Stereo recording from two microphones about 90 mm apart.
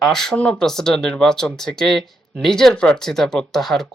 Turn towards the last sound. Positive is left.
turn(degrees=5)  # may be behind; listen again after turning